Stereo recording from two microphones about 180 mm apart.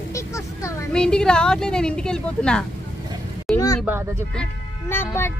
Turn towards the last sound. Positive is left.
turn(degrees=10)  # may be behind; listen again after turning